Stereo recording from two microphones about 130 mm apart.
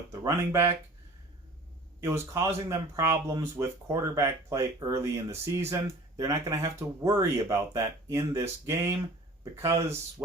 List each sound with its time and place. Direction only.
0.1 s speech: 20° right (ahead or behind)
2.0 s speech: 20° right (ahead or behind)